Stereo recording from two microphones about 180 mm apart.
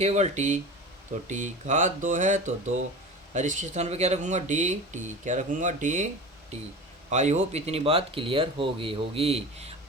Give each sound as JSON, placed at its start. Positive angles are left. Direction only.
{"t": 0.0, "sound": "speech", "side_deg": -40}
{"t": 7.1, "sound": "speech", "side_deg": -40}